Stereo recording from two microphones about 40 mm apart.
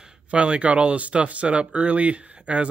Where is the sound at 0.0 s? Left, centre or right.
Right.